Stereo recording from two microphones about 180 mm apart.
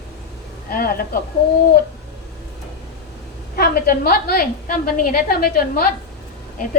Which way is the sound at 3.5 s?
55° left (ahead or behind).